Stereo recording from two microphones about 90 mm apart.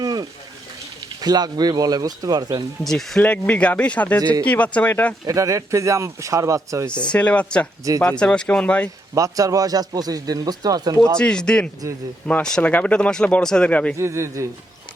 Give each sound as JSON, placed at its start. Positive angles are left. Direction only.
{"t": 0.0, "sound": "a sound", "side_deg": -45}
{"t": 1.2, "sound": "speech", "side_deg": -50}
{"t": 2.8, "sound": "speech", "side_deg": 5}
{"t": 3.2, "sound": "speech", "side_deg": 15}
{"t": 5.2, "sound": "speech", "side_deg": -35}
{"t": 6.9, "sound": "speech", "side_deg": 10}
{"t": 9.1, "sound": "speech", "side_deg": -40}
{"t": 11.2, "sound": "speech", "side_deg": 10}
{"t": 14.0, "sound": "speech", "side_deg": -30}